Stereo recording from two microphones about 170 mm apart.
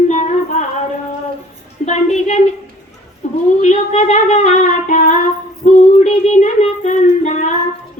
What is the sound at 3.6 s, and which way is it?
Speech, 40° left (ahead or behind).